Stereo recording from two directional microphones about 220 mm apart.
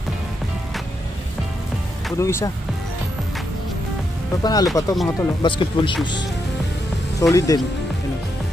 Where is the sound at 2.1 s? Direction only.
15° left (ahead or behind).